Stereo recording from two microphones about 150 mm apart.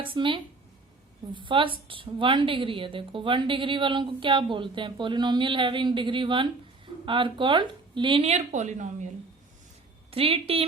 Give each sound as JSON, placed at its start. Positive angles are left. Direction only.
{"t": 0.0, "sound": "a woman's voice", "side_deg": -35}
{"t": 10.1, "sound": "a woman's voice", "side_deg": -40}